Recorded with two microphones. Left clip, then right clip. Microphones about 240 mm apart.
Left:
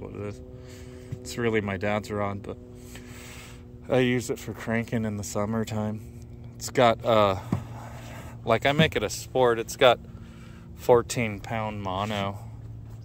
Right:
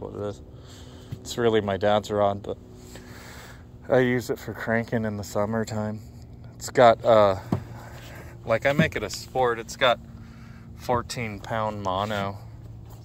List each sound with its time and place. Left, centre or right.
0.0 s a sound: centre
1.4 s speech: left
3.8 s speech: centre
10.9 s speech: left
11.3 s speech: centre